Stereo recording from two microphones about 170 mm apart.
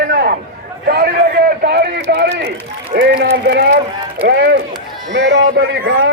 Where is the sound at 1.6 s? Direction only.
75° right (ahead or behind).